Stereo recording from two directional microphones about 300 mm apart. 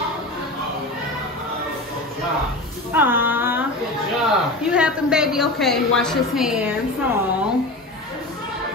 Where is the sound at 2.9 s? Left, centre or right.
Centre.